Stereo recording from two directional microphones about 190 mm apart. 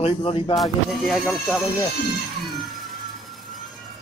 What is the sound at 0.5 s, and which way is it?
Speech, centre (ahead or behind).